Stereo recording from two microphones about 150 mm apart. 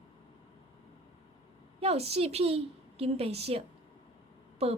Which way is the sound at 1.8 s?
40° right (ahead or behind).